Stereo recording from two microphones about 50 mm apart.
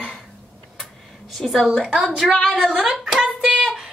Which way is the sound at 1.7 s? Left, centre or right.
Centre.